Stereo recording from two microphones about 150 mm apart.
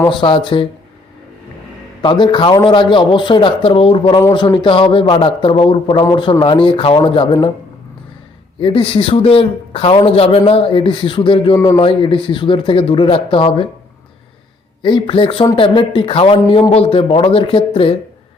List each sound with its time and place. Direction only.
0.1 s speech: 35° left (ahead or behind)
2.0 s speech: 30° left (ahead or behind)
8.6 s speech: 35° left (ahead or behind)
14.8 s speech: 35° left (ahead or behind)